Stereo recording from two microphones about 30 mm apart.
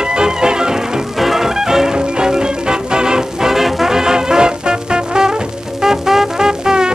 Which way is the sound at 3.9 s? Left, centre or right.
Right.